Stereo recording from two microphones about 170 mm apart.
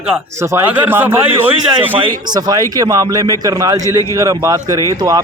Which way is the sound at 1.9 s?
25° right (ahead or behind).